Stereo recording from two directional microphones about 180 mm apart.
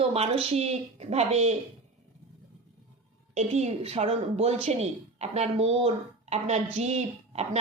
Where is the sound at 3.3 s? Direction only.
40° right (ahead or behind).